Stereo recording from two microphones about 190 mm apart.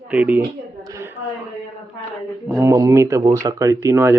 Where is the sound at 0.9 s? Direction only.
15° right (ahead or behind).